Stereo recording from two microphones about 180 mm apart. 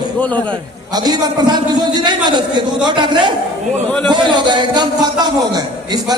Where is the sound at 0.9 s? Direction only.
20° right (ahead or behind).